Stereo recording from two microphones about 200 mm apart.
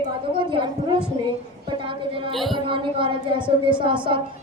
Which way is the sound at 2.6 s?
25° right (ahead or behind).